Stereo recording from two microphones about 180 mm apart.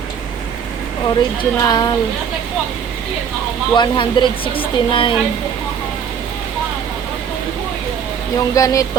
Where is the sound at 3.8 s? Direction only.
25° left (ahead or behind).